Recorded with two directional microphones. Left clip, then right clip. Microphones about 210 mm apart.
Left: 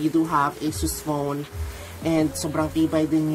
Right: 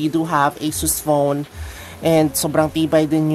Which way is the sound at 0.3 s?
50° right (ahead or behind).